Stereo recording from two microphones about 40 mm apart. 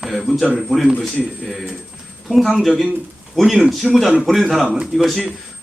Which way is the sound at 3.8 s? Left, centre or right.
Centre.